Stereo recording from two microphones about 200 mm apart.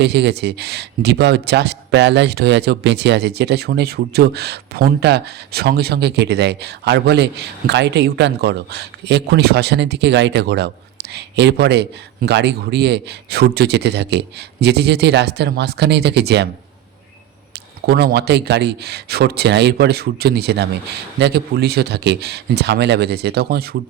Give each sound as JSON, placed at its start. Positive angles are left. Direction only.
{"t": 0.0, "sound": "a man's voice", "side_deg": -55}
{"t": 17.8, "sound": "a man's voice", "side_deg": -50}